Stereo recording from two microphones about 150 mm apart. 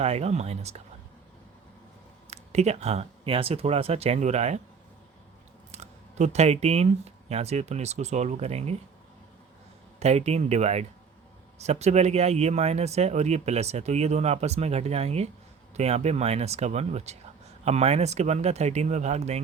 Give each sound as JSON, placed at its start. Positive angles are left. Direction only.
{"t": 0.0, "sound": "speech", "side_deg": -45}
{"t": 2.3, "sound": "speech", "side_deg": -45}
{"t": 5.7, "sound": "speech", "side_deg": -50}
{"t": 10.0, "sound": "speech", "side_deg": -45}